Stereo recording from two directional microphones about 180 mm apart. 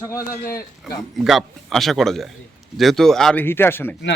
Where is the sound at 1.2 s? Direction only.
Centre (ahead or behind).